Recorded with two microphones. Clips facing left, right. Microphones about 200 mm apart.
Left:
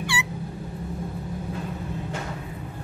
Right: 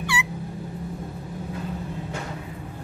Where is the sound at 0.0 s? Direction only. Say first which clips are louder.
Right 1 dB; 30° left (ahead or behind).